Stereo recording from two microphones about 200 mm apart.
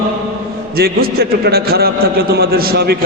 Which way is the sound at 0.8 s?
50° right (ahead or behind).